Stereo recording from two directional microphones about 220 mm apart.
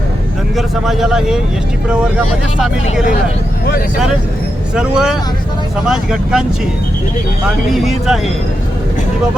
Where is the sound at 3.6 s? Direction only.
45° left (ahead or behind).